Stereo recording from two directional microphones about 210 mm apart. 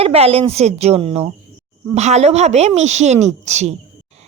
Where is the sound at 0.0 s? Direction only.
30° right (ahead or behind).